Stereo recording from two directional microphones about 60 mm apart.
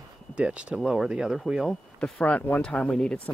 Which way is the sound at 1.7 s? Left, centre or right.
Centre.